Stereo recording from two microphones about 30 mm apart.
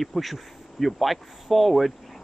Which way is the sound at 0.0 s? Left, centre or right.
Centre.